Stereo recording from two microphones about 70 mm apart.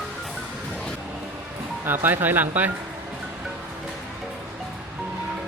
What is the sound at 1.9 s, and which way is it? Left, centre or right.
Speech, right.